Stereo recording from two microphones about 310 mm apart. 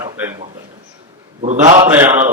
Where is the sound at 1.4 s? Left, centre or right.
Right.